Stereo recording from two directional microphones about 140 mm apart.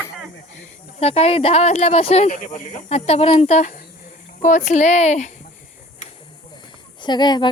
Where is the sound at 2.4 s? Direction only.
60° left (ahead or behind).